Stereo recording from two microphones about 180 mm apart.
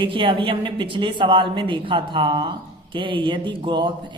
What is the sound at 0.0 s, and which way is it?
A man's voice, 25° right (ahead or behind).